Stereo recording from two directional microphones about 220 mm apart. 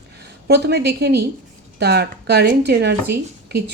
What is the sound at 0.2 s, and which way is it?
A woman's voice, 50° right (ahead or behind).